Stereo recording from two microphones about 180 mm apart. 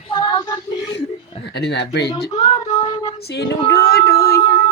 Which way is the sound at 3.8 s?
60° left (ahead or behind).